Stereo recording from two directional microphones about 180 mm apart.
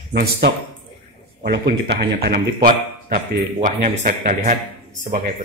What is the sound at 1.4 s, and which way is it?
A man's voice, 70° right (ahead or behind).